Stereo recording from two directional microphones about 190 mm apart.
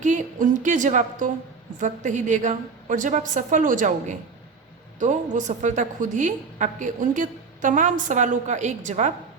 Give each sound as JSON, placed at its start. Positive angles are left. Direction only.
{"t": 0.0, "sound": "a woman's voice", "side_deg": -40}